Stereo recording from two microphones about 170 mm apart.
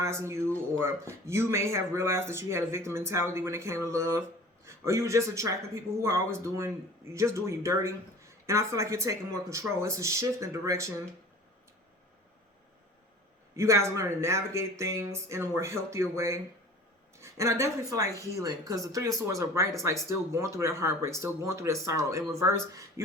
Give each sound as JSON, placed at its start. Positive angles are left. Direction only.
{"t": 0.0, "sound": "a man's voice", "side_deg": -15}
{"t": 13.6, "sound": "a man's voice", "side_deg": -15}
{"t": 17.2, "sound": "a sound", "side_deg": -15}
{"t": 18.2, "sound": "a man's voice", "side_deg": -20}